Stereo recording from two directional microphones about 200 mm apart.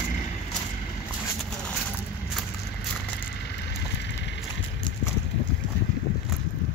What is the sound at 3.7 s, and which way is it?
Vehicle, 60° left (ahead or behind).